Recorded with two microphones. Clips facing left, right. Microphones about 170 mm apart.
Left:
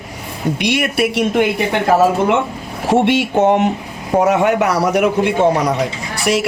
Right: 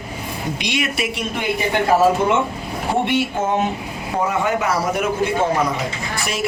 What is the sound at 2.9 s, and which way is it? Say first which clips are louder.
Speech: left 6 dB; 80° left.